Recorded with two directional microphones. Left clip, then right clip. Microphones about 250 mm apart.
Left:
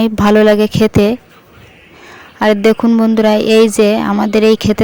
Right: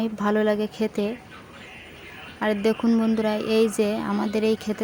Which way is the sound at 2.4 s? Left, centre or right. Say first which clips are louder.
Left 13 dB; left.